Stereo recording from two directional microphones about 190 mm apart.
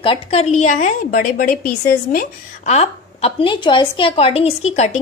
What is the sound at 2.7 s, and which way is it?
Speech, 30° left (ahead or behind).